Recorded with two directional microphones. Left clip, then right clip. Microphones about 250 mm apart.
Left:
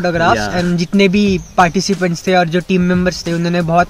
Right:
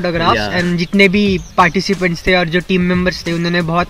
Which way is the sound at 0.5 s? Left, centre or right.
Centre.